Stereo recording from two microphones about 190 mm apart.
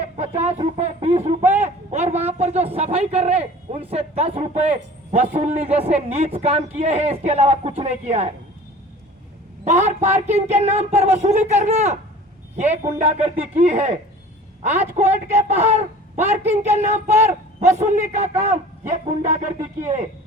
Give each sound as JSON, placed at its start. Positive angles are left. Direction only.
{"t": 0.2, "sound": "a man's voice", "side_deg": -35}
{"t": 9.6, "sound": "a man's voice", "side_deg": -35}